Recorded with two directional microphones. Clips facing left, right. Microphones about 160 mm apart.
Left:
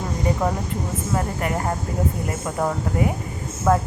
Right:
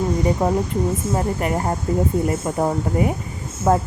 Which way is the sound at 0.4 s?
30° right (ahead or behind).